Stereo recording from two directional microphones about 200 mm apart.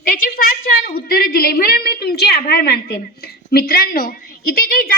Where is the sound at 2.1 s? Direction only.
55° left (ahead or behind).